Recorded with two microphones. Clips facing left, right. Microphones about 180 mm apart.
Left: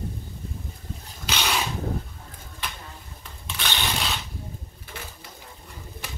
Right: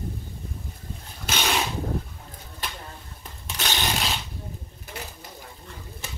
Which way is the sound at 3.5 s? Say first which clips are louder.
Right 1 dB; 40° right (ahead or behind).